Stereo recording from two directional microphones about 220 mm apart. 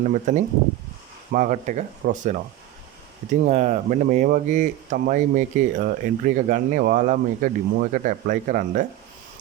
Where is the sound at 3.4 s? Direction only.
30° right (ahead or behind).